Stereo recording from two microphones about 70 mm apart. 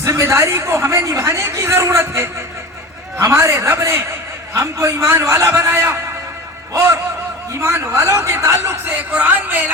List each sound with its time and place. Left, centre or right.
0.0 s a man's voice: right
5.5 s a man's voice: right
8.9 s speech: right